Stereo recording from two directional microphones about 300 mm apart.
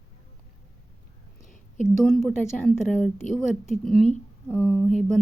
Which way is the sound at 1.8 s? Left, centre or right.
Centre.